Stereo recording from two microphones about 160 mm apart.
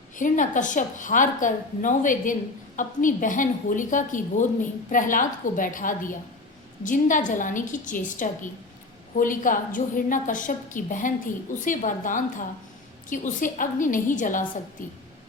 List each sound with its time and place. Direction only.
0.2 s a woman's voice: 55° left (ahead or behind)